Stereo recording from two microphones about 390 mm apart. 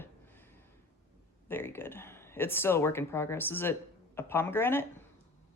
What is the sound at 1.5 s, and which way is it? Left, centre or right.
Speech, centre.